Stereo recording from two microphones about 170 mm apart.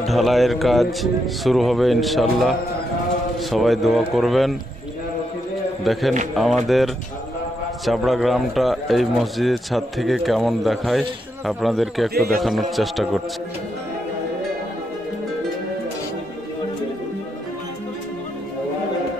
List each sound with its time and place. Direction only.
0.0 s a man's voice: centre (ahead or behind)
5.9 s a man's voice: centre (ahead or behind)
7.8 s a man's voice: centre (ahead or behind)
12.1 s a man's voice: 65° right (ahead or behind)
12.4 s a man's voice: centre (ahead or behind)